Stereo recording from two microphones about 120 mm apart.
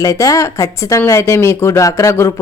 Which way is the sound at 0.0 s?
30° left (ahead or behind).